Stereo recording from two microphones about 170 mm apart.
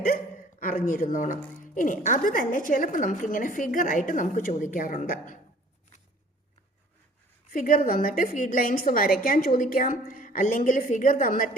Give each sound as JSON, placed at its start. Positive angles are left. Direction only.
{"t": 0.6, "sound": "a woman's voice", "side_deg": 55}
{"t": 7.5, "sound": "a woman's voice", "side_deg": 55}